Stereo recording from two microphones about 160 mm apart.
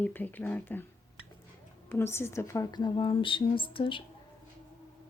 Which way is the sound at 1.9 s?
15° left (ahead or behind).